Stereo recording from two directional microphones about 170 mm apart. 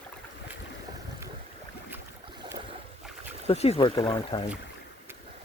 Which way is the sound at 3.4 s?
40° left (ahead or behind).